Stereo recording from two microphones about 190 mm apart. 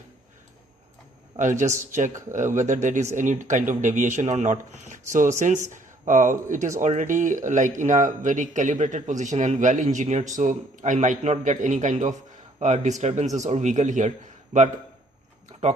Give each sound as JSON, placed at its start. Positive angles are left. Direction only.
{"t": 1.4, "sound": "speech", "side_deg": -40}